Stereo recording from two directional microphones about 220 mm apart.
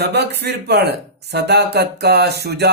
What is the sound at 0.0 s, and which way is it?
Speech, 45° right (ahead or behind).